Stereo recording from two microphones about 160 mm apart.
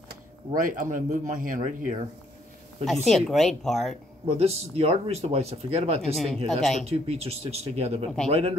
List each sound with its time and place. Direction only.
0.6 s speech: 55° right (ahead or behind)
2.8 s a woman's voice: centre (ahead or behind)
4.3 s speech: 40° right (ahead or behind)
6.1 s a woman's voice: centre (ahead or behind)
6.9 s speech: 40° right (ahead or behind)